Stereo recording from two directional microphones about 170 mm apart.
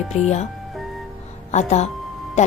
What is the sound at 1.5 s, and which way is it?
Speech, 40° left (ahead or behind).